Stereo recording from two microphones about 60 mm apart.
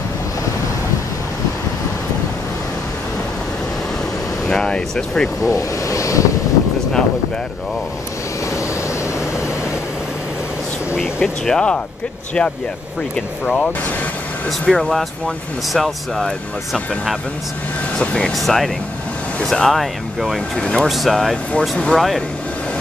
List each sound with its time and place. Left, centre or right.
4.5 s speech: centre
5.4 s speech: left
11.4 s speech: centre
14.7 s speech: centre
17.9 s speech: centre
18.3 s speech: centre
20.5 s speech: centre
20.9 s speech: centre
21.5 s speech: centre
21.9 s speech: centre